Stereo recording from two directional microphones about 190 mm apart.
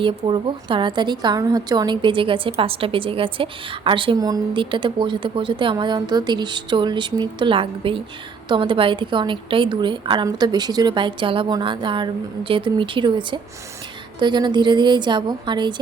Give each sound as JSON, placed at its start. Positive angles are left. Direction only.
{"t": 0.0, "sound": "a woman's voice", "side_deg": -25}